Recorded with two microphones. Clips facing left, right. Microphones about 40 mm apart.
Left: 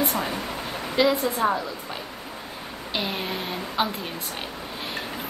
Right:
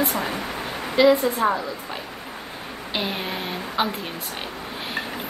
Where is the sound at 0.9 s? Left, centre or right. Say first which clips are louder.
Right 5 dB; centre.